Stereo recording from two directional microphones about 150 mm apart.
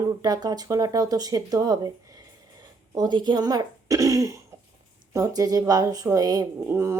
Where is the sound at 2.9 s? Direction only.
30° right (ahead or behind).